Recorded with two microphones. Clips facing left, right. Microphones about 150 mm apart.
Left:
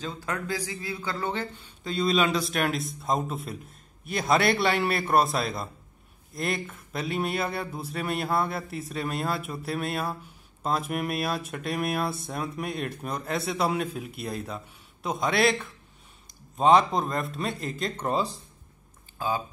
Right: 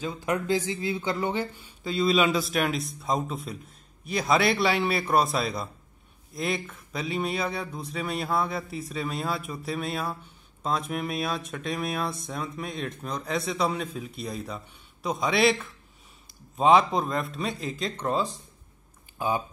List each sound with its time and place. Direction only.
0.0 s speech: 15° right (ahead or behind); by 18.3 s 10° left (ahead or behind)
19.1 s speech: 20° right (ahead or behind)